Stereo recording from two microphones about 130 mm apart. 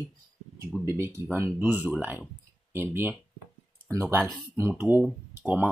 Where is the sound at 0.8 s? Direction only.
20° right (ahead or behind).